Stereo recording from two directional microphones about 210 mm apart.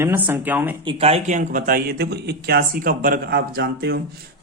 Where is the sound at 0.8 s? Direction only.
25° right (ahead or behind).